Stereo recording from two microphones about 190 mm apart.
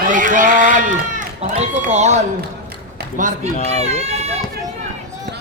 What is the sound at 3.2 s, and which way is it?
Speech, 40° right (ahead or behind).